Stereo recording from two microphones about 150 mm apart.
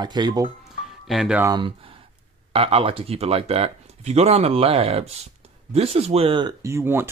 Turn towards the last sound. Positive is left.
turn(degrees=-15)  # may be behind; listen again after turning